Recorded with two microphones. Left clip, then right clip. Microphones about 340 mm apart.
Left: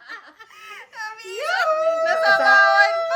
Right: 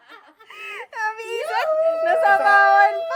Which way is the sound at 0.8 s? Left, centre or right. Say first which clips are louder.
Right 7 dB; centre.